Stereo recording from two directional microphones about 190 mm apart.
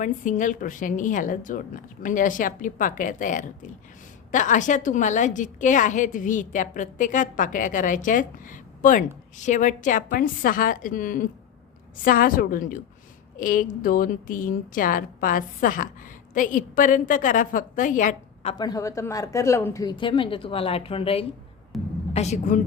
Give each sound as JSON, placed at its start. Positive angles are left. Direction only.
{"t": 0.0, "sound": "a woman's voice", "side_deg": 40}
{"t": 18.5, "sound": "a woman's voice", "side_deg": 20}
{"t": 21.7, "sound": "a woman's voice", "side_deg": 0}
{"t": 22.1, "sound": "a woman's voice", "side_deg": 35}